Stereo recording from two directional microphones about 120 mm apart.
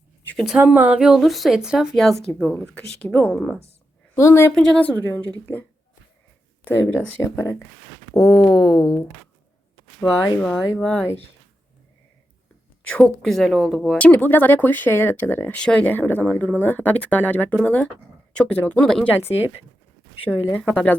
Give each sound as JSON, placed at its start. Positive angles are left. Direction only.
{"t": 0.3, "sound": "a woman's voice", "side_deg": -5}
{"t": 4.1, "sound": "a woman's voice", "side_deg": 25}
{"t": 4.5, "sound": "speech", "side_deg": 5}
{"t": 6.7, "sound": "speech", "side_deg": 15}
{"t": 7.3, "sound": "a woman's voice", "side_deg": 25}
{"t": 8.1, "sound": "a woman's voice", "side_deg": -5}
{"t": 10.4, "sound": "speech", "side_deg": 5}
{"t": 12.9, "sound": "speech", "side_deg": 5}
{"t": 20.5, "sound": "speech", "side_deg": 15}